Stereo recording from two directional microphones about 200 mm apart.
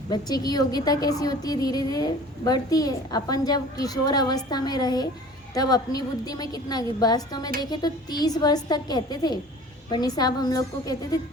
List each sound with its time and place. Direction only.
0.1 s a woman's voice: 20° left (ahead or behind)